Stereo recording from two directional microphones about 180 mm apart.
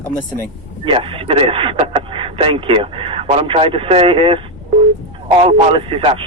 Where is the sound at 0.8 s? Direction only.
30° right (ahead or behind).